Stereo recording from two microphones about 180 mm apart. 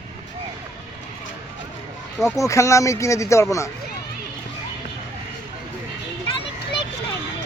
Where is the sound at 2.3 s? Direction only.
15° left (ahead or behind).